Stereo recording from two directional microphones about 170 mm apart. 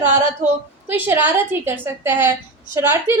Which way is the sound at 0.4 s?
10° right (ahead or behind).